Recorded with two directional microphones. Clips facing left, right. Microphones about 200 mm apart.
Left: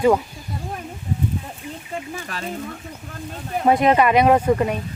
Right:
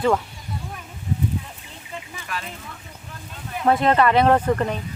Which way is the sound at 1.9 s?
40° left (ahead or behind).